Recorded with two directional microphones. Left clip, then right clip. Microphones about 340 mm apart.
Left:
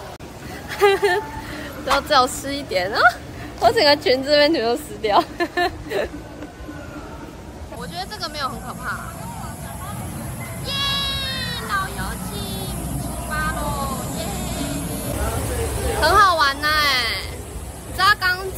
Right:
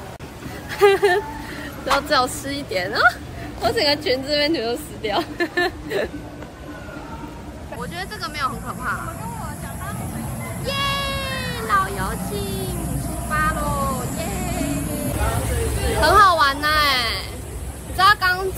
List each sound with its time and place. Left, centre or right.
0.7 s speech: centre
3.6 s a woman's voice: left
7.8 s a woman's voice: centre
10.6 s music: centre
16.0 s a woman's voice: centre